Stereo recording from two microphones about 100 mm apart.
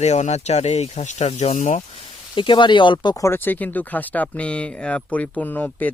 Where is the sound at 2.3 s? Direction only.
55° left (ahead or behind).